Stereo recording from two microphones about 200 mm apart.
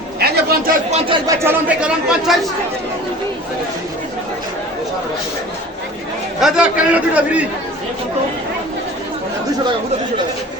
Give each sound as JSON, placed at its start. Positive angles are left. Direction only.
{"t": 0.2, "sound": "chatter", "side_deg": -45}
{"t": 0.9, "sound": "speech", "side_deg": -25}
{"t": 1.5, "sound": "speech", "side_deg": -5}
{"t": 6.4, "sound": "a man's voice", "side_deg": -5}